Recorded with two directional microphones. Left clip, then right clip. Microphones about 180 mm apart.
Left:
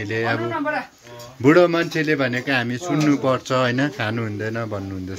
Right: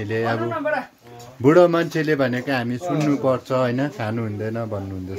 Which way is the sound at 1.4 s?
20° right (ahead or behind).